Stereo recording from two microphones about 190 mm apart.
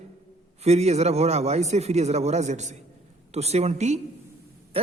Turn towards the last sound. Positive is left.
turn(degrees=-30)  # may be behind; listen again after turning